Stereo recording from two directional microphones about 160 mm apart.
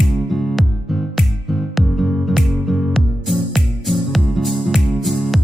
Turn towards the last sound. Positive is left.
turn(degrees=0)  # may be behind; listen again after turning